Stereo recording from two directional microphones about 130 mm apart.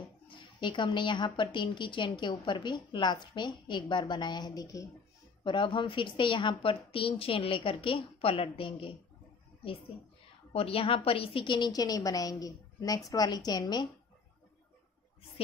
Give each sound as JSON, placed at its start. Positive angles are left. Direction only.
{"t": 0.3, "sound": "a woman's voice", "side_deg": 40}
{"t": 10.5, "sound": "a woman's voice", "side_deg": 45}